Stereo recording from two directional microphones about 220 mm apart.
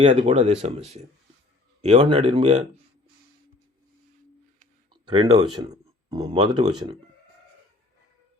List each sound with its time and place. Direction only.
0.0 s speech: 25° right (ahead or behind)
5.0 s speech: 20° right (ahead or behind)